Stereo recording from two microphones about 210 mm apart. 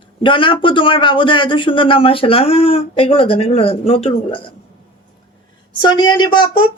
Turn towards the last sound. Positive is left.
turn(degrees=20)  # may be behind; listen again after turning